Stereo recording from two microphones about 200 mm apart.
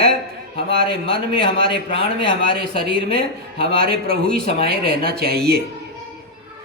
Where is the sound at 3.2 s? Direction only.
50° right (ahead or behind).